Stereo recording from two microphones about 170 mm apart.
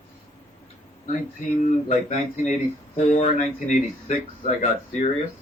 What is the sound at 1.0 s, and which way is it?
Speech, 45° left (ahead or behind).